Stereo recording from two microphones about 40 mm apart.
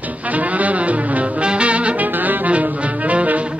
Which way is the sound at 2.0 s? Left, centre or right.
Right.